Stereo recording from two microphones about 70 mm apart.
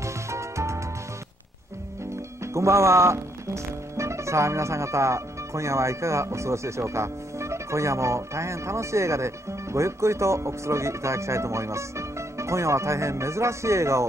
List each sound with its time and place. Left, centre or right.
0.0 s music: right
2.4 s speech: right